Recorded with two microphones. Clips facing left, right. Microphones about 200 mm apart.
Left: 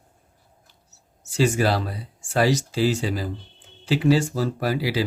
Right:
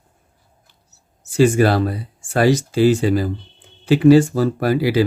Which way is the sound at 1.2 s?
55° right (ahead or behind).